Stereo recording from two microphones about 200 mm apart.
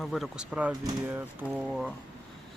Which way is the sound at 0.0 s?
Centre (ahead or behind).